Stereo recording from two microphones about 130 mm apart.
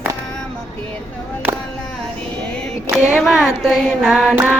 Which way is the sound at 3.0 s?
5° right (ahead or behind).